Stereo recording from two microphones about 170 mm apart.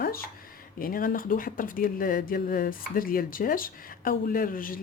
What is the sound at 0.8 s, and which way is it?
Speech, 55° left (ahead or behind).